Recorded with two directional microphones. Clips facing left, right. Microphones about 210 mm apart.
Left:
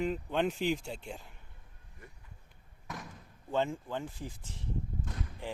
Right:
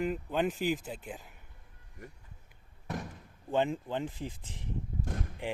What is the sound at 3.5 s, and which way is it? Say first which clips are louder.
Speech: right 2 dB; 15° right (ahead or behind).